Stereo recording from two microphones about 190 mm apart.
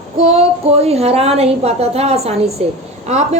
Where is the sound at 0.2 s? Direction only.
35° right (ahead or behind).